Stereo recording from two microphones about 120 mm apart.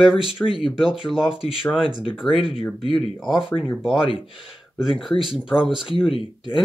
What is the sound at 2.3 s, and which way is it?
Speech, 45° left (ahead or behind).